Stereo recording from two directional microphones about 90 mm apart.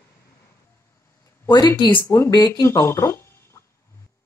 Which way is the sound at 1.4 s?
40° left (ahead or behind).